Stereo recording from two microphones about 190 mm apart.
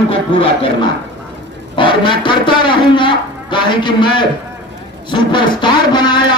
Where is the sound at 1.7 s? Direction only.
25° left (ahead or behind).